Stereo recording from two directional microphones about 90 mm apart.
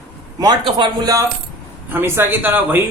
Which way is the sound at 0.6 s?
65° right (ahead or behind).